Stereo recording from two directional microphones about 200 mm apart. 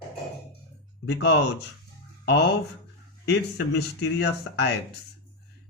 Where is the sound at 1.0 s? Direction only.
60° left (ahead or behind).